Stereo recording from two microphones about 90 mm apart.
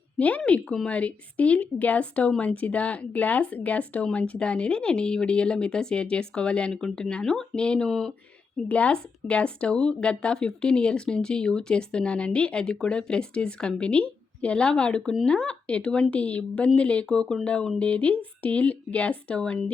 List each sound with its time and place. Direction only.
0.2 s a woman's voice: 15° left (ahead or behind)